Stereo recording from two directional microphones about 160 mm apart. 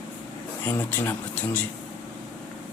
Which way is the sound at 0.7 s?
10° left (ahead or behind).